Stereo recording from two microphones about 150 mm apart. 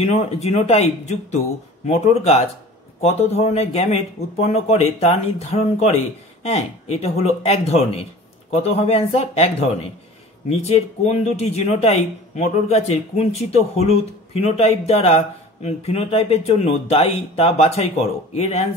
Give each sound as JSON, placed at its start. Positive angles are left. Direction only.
{"t": 0.0, "sound": "speech", "side_deg": 45}